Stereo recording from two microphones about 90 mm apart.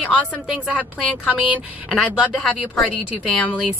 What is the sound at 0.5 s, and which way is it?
A woman's voice, 15° right (ahead or behind).